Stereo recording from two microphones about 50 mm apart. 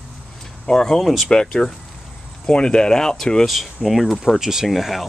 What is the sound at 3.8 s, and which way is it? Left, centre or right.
Speech, centre.